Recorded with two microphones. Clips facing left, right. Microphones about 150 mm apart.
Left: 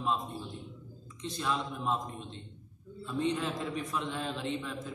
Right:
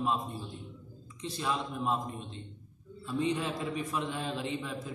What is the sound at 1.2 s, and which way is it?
A man's voice, 5° right (ahead or behind).